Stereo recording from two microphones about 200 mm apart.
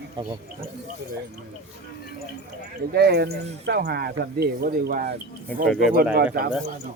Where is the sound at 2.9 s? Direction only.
55° right (ahead or behind).